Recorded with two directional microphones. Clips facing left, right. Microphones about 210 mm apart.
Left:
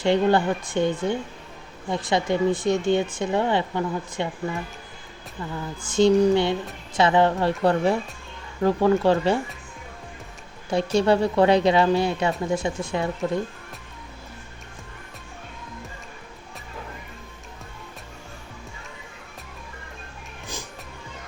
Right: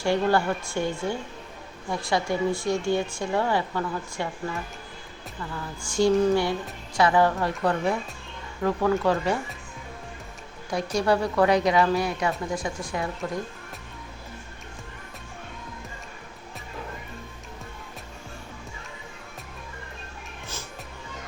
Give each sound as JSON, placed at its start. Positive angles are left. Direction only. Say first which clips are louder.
{"t": 0.0, "sound": "speech", "louder": "left 3 dB", "side_deg": 20}
{"t": 5.9, "sound": "speech", "louder": "left 3 dB", "side_deg": 20}
{"t": 10.7, "sound": "speech", "louder": "left 4 dB", "side_deg": 25}